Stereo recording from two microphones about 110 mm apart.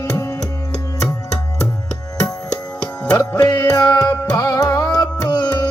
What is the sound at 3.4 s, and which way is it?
Music, 35° left (ahead or behind).